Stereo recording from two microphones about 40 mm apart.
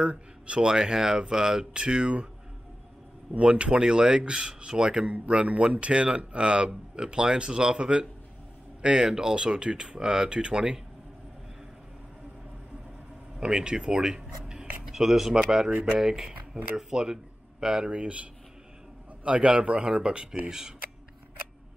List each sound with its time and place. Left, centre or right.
0.0 s speech: right
3.3 s speech: right
5.1 s speech: right
13.4 s speech: centre
15.7 s speech: right
16.0 s speech: centre